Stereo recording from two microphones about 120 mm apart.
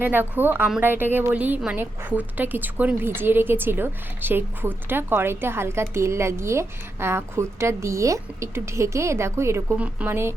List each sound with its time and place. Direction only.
0.0 s a woman's voice: 15° right (ahead or behind)
9.7 s speech: 10° right (ahead or behind)